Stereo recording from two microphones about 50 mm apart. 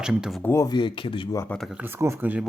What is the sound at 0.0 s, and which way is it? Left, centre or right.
Speech, centre.